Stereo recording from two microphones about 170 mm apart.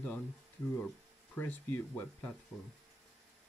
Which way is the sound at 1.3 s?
10° left (ahead or behind).